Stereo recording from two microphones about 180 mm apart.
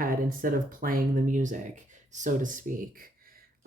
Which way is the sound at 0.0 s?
50° right (ahead or behind).